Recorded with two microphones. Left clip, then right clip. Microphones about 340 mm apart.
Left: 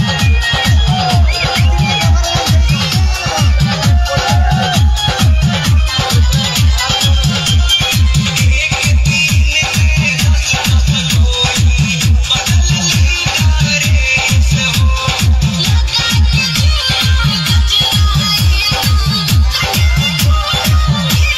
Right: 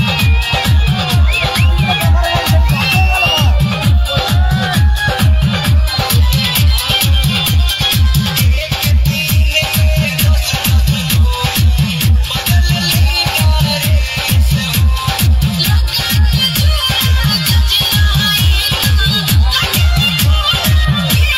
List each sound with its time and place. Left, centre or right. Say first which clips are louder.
8.6 s music: left 4 dB; right
12.3 s music: left 4 dB; right
17.6 s music: left 2 dB; centre